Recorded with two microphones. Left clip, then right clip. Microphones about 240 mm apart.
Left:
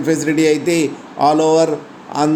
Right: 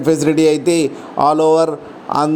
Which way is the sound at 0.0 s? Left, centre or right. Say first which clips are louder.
Right 2 dB; right.